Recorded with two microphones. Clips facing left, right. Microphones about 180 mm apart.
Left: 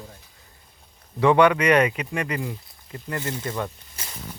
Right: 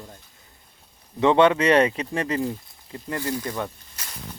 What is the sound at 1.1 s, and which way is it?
Speech, 25° right (ahead or behind).